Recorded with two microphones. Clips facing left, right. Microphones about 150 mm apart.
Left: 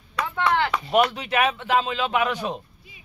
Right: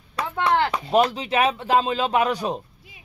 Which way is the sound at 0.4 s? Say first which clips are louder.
Right 2 dB; 35° right (ahead or behind).